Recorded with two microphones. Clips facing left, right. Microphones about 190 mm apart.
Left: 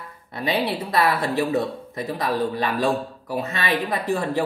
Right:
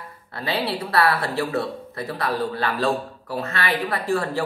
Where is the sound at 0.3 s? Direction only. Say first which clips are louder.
Left 2 dB; 15° left (ahead or behind).